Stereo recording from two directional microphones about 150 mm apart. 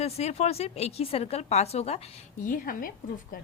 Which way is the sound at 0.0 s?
45° left (ahead or behind).